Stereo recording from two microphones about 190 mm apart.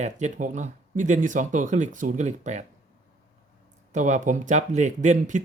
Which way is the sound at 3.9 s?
40° right (ahead or behind).